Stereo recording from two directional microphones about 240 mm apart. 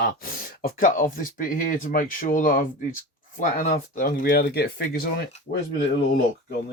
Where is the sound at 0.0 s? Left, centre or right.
Left.